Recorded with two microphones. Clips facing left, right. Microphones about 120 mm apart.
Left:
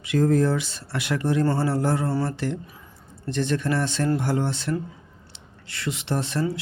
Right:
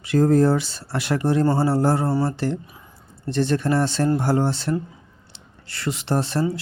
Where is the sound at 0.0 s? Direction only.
35° right (ahead or behind).